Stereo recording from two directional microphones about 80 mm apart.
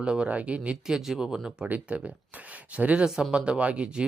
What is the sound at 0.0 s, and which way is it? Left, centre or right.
Speech, centre.